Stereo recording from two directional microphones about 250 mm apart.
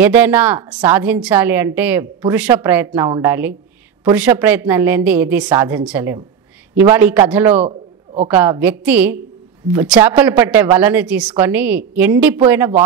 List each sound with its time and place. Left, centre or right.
0.0 s a woman's voice: centre
7.6 s a sound: right
8.3 s a woman's voice: centre